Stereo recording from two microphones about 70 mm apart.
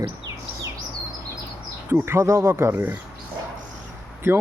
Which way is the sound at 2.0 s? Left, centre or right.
Right.